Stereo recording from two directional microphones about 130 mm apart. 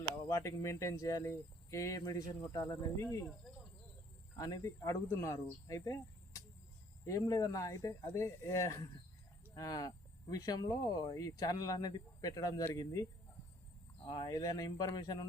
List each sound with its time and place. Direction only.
0.3 s speech: 25° left (ahead or behind)
4.4 s speech: 25° left (ahead or behind)
14.1 s speech: 30° left (ahead or behind)